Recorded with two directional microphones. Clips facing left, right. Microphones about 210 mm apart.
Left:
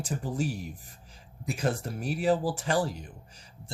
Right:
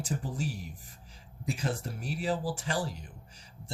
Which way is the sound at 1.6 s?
55° left (ahead or behind).